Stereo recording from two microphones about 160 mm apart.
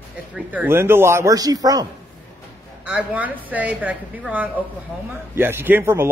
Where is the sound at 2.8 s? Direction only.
10° right (ahead or behind).